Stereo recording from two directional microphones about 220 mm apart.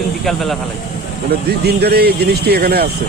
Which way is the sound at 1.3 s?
45° right (ahead or behind).